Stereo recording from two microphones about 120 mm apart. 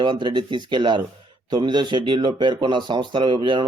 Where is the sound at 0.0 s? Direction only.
40° right (ahead or behind).